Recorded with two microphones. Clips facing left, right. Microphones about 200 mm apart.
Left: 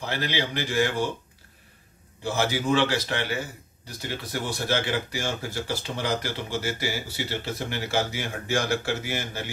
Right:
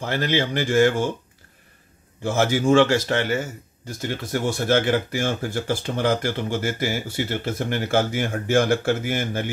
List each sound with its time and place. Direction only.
0.0 s speech: 50° right (ahead or behind)
2.2 s speech: 50° right (ahead or behind)